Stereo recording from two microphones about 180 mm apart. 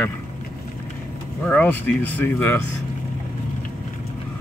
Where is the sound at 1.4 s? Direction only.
10° left (ahead or behind).